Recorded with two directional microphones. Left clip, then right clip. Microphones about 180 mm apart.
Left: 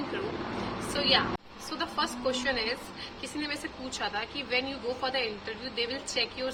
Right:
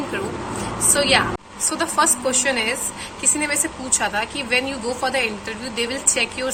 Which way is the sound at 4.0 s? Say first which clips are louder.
Right 9 dB; 15° left (ahead or behind).